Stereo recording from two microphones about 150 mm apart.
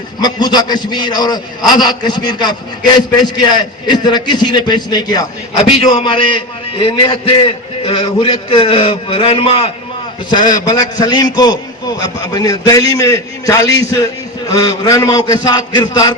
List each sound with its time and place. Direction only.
0.2 s a man's voice: 30° left (ahead or behind)
3.8 s a man's voice: 30° left (ahead or behind)
10.2 s a man's voice: 30° left (ahead or behind)